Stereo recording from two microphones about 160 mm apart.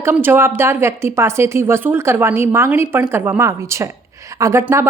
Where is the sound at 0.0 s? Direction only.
15° right (ahead or behind).